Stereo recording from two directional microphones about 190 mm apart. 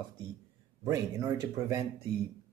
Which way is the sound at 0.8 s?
20° right (ahead or behind).